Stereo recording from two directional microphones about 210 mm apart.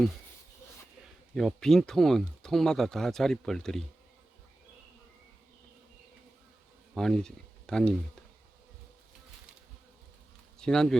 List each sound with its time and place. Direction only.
1.4 s speech: centre (ahead or behind)
6.9 s speech: centre (ahead or behind)
10.6 s speech: 5° left (ahead or behind)